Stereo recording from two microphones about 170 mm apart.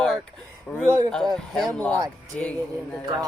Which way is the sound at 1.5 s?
Centre (ahead or behind).